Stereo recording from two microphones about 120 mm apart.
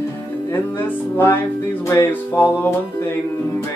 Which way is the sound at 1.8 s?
20° left (ahead or behind).